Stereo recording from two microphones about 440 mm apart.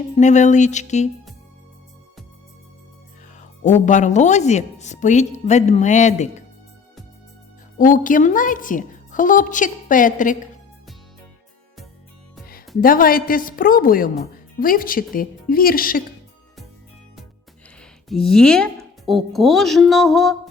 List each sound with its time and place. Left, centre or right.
0.2 s speech: centre
3.3 s speech: centre
7.8 s speech: centre
12.8 s a woman's voice: centre
17.7 s a woman's voice: centre